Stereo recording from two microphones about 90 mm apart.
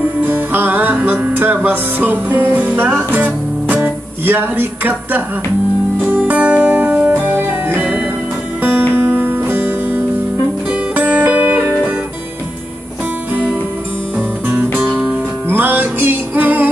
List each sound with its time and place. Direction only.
0.3 s music: 25° right (ahead or behind)
14.5 s music: 20° right (ahead or behind)
14.9 s music: 10° right (ahead or behind)
15.4 s music: 20° right (ahead or behind)